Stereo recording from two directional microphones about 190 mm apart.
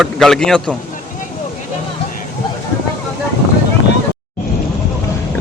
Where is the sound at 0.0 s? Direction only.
Centre (ahead or behind).